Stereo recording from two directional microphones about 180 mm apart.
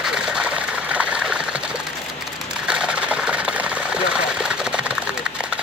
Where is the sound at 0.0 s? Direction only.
5° right (ahead or behind).